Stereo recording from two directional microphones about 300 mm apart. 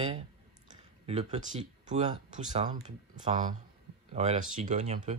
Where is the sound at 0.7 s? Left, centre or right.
Right.